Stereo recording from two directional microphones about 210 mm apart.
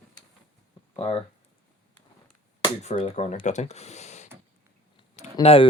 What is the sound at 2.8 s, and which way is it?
Speech, 30° left (ahead or behind).